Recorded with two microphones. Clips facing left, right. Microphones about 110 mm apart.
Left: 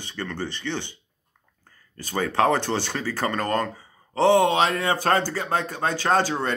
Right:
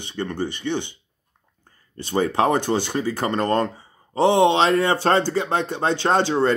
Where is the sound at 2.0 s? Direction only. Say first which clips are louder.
Right 2 dB; 25° right (ahead or behind).